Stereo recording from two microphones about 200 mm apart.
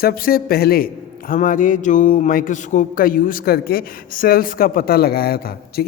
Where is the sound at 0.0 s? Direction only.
50° left (ahead or behind).